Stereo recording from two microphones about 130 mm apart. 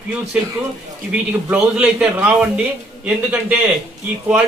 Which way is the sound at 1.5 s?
10° right (ahead or behind).